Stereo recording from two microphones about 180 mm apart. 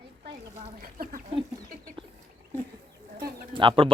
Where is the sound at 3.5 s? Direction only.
30° right (ahead or behind).